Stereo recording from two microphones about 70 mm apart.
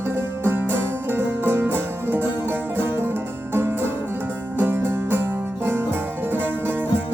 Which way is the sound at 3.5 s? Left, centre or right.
Right.